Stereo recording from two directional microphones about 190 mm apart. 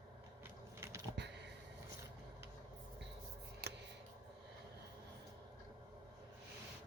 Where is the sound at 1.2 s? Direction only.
65° right (ahead or behind).